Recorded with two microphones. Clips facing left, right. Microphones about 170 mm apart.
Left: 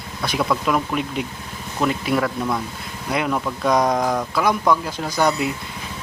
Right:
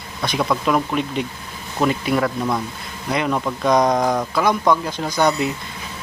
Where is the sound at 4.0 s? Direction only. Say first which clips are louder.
Right 2 dB; 10° right (ahead or behind).